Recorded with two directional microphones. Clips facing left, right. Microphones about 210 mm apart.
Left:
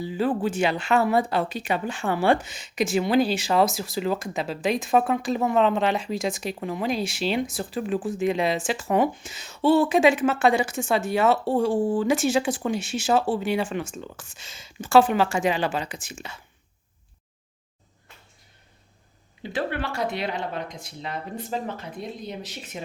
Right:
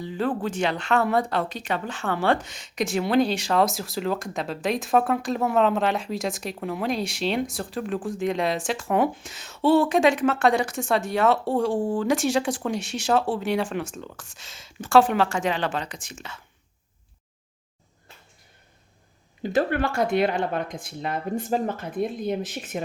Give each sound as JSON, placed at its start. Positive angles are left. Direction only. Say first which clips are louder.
{"t": 0.0, "sound": "speech", "louder": "left 2 dB", "side_deg": 5}
{"t": 19.4, "sound": "speech", "louder": "right 5 dB", "side_deg": -45}